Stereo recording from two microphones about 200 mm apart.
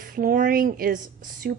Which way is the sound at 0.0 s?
45° right (ahead or behind).